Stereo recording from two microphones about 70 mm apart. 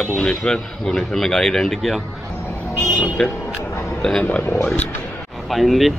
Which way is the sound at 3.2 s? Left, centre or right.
Centre.